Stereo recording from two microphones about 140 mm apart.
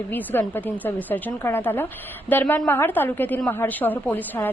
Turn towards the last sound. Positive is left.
turn(degrees=10)  # may be behind; listen again after turning